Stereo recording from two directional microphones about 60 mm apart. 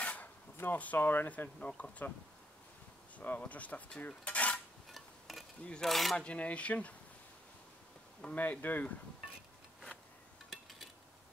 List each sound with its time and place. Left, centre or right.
0.0 s a sound: left
0.6 s speech: left
3.2 s speech: left
4.2 s cutlery: left
5.3 s a sound: centre
5.8 s cutlery: centre
6.1 s speech: centre
8.4 s speech: left
10.5 s a sound: centre